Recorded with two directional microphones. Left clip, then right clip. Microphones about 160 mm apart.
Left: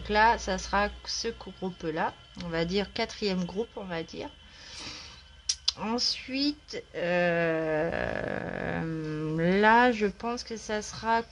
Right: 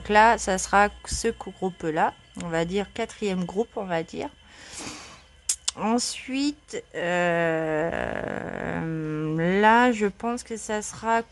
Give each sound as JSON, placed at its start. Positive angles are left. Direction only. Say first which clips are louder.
{"t": 0.0, "sound": "a woman's voice", "louder": "right 5 dB", "side_deg": -40}
{"t": 3.4, "sound": "speech", "louder": "right 6 dB", "side_deg": -40}
{"t": 4.7, "sound": "a sound", "louder": "right 3 dB", "side_deg": -50}
{"t": 5.5, "sound": "speech", "louder": "right 4 dB", "side_deg": -45}